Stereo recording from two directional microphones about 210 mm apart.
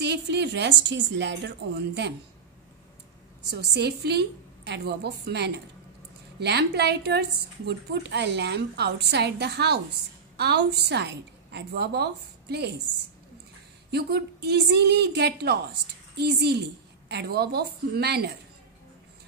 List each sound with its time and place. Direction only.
0.0 s a woman's voice: 55° right (ahead or behind)
3.4 s a woman's voice: 50° right (ahead or behind)
13.8 s a woman's voice: 50° right (ahead or behind)